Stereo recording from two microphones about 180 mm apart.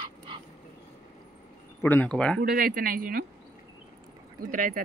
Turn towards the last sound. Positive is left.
turn(degrees=-50)  # may be behind; listen again after turning